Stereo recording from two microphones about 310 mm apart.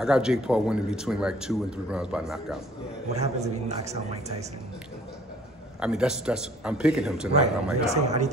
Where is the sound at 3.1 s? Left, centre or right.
Right.